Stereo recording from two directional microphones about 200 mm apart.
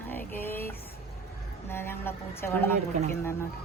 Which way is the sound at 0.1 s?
10° left (ahead or behind).